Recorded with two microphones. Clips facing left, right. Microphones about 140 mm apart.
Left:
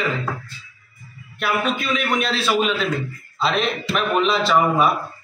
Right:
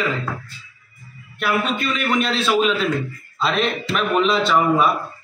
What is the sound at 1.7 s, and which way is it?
Speech, 5° left (ahead or behind).